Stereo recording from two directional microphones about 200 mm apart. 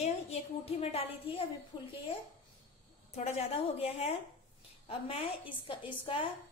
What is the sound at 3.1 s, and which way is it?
A woman's voice, 30° left (ahead or behind).